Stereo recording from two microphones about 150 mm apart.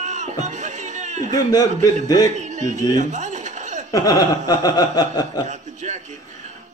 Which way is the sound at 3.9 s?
25° left (ahead or behind).